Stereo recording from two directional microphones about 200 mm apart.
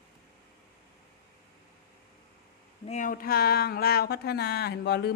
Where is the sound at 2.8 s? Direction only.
35° left (ahead or behind).